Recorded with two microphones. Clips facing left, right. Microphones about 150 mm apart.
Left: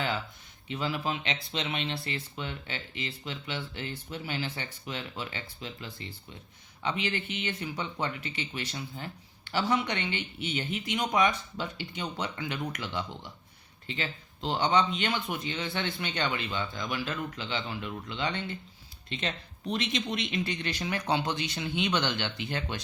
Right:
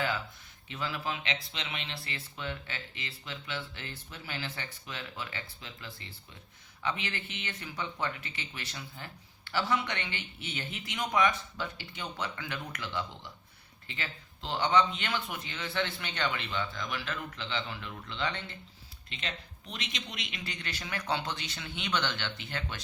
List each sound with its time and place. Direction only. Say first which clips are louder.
0.7 s speech: left 4 dB; 20° left (ahead or behind)
19.7 s speech: left 10 dB; 35° left (ahead or behind); by 22.8 s 15° left (ahead or behind)